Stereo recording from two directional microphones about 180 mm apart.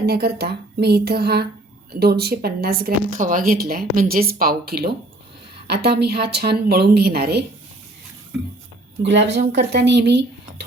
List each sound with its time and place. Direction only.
0.0 s speech: 60° right (ahead or behind)
9.0 s speech: 70° right (ahead or behind)